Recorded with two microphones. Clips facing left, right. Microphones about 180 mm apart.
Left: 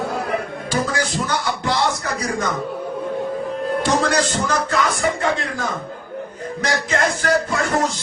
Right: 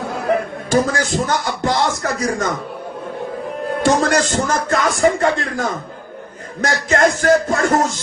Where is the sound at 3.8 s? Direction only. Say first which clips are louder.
Right 5 dB; 45° right (ahead or behind).